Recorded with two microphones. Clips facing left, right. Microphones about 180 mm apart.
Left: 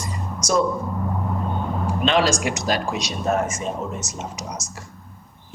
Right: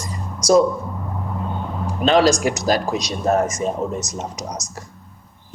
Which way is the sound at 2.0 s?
40° right (ahead or behind).